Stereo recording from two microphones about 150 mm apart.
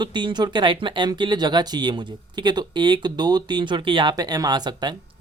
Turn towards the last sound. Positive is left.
turn(degrees=-30)  # may be behind; listen again after turning